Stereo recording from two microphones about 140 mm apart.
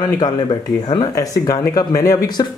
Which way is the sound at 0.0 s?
30° left (ahead or behind).